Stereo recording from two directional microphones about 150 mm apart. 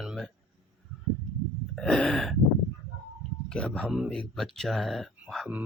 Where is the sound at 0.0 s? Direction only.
5° right (ahead or behind).